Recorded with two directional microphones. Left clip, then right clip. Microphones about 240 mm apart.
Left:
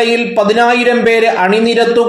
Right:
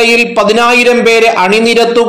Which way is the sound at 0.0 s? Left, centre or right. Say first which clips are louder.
Right 4 dB; right.